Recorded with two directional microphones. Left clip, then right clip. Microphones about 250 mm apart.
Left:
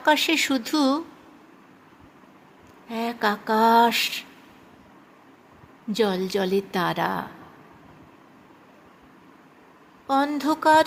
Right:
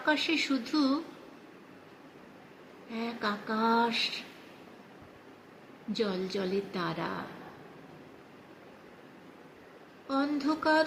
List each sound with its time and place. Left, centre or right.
0.0 s a woman's voice: left
2.9 s a woman's voice: left
5.9 s a woman's voice: left
10.1 s a woman's voice: left